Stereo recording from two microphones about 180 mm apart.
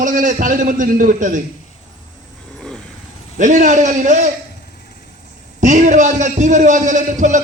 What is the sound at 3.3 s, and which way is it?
Speech, 45° right (ahead or behind).